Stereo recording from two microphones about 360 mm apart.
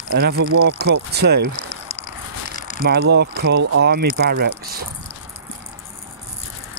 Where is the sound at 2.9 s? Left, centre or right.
Right.